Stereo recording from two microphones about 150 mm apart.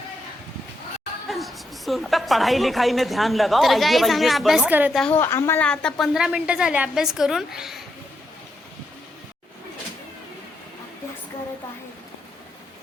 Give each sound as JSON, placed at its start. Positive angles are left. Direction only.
{"t": 1.3, "sound": "a woman's voice", "side_deg": 0}
{"t": 5.1, "sound": "a woman's voice", "side_deg": 20}